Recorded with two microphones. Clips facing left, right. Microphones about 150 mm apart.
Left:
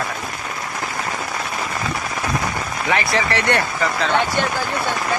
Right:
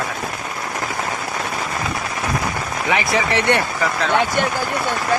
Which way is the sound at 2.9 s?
15° right (ahead or behind).